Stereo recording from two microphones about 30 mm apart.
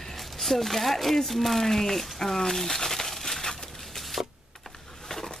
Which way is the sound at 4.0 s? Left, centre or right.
Centre.